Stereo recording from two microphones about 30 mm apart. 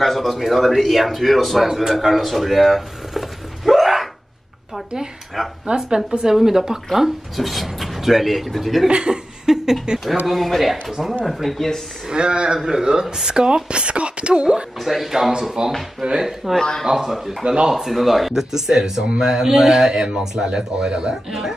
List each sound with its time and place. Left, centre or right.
0.0 s a man's voice: centre
1.8 s a sound: centre
5.4 s speech: centre
5.8 s a man's voice: centre
8.8 s laughter: right
10.2 s a man's voice: centre
11.2 s a man's voice: centre
12.1 s speech: right
14.8 s a man's voice: centre
15.0 s speech: centre
20.3 s speech: right
21.3 s speech: centre